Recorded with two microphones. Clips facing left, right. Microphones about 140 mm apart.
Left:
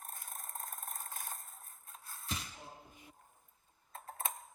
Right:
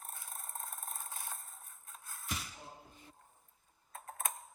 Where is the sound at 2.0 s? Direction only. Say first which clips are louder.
Even; 25° left (ahead or behind).